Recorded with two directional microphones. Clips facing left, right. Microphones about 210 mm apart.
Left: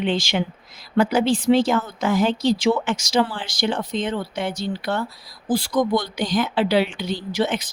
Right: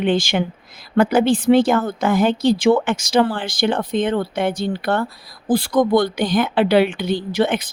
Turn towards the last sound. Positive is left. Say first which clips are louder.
# right 4 dB
turn(degrees=-55)  # may be behind; listen again after turning